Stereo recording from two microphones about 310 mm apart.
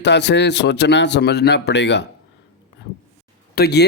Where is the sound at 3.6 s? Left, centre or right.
Left.